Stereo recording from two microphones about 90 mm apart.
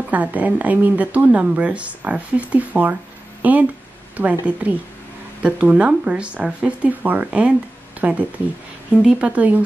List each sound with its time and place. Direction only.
0.1 s speech: 15° right (ahead or behind)